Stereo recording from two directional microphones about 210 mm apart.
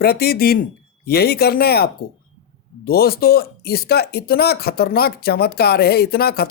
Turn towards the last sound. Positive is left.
turn(degrees=45)  # may be behind; listen again after turning